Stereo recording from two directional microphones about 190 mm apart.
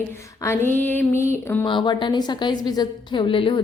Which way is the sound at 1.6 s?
25° left (ahead or behind).